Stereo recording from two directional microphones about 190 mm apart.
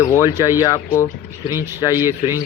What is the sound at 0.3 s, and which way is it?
Speech, 15° right (ahead or behind).